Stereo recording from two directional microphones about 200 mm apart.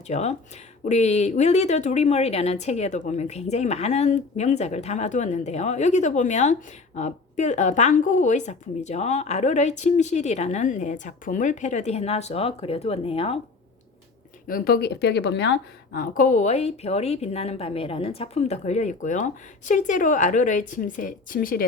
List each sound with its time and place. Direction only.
0.1 s speech: 35° left (ahead or behind)
14.4 s speech: 50° left (ahead or behind)
16.1 s speech: 40° left (ahead or behind)